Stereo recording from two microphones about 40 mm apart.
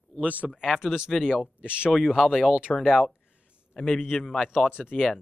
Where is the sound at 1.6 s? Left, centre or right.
Right.